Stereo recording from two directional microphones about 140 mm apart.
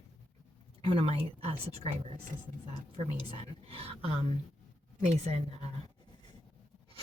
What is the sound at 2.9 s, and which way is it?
A woman's voice, 50° right (ahead or behind).